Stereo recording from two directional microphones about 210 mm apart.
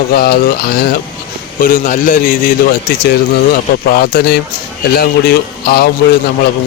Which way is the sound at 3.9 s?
45° left (ahead or behind).